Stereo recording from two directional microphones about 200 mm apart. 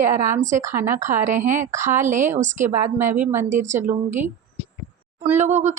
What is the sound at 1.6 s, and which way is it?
Speech, 15° right (ahead or behind).